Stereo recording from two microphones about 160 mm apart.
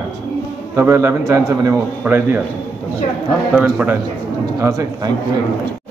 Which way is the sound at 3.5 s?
10° right (ahead or behind).